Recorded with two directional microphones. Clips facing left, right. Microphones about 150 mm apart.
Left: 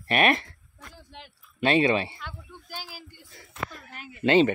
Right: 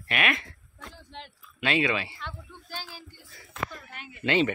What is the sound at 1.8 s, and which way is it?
Speech, 25° left (ahead or behind).